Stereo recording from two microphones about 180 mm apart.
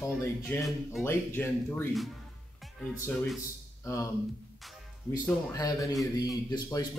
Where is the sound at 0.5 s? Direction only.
10° left (ahead or behind).